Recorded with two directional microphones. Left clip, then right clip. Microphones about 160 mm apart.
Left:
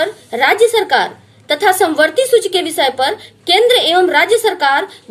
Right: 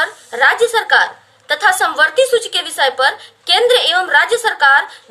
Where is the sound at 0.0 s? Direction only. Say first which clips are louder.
Right 1 dB; 30° left (ahead or behind).